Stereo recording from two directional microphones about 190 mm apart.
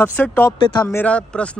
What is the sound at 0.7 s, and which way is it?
Speech, 20° left (ahead or behind).